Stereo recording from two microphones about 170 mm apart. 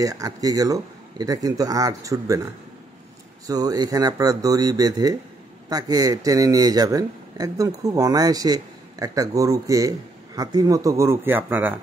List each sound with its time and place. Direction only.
0.0 s speech: 20° right (ahead or behind)